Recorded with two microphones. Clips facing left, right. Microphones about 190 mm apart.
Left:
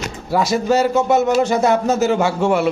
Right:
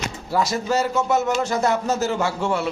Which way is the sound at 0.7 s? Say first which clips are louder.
Left 7 dB; 25° left (ahead or behind).